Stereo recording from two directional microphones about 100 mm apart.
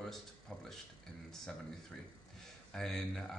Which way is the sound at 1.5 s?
5° left (ahead or behind).